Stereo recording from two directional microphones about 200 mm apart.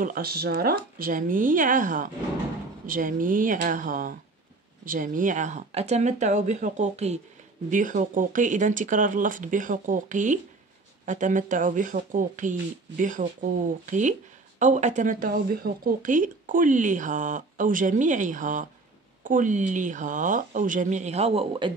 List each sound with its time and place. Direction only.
0.0 s speech: 45° right (ahead or behind); by 21.7 s 25° right (ahead or behind)